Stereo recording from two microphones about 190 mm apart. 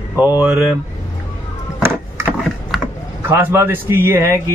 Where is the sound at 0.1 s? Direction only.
10° right (ahead or behind).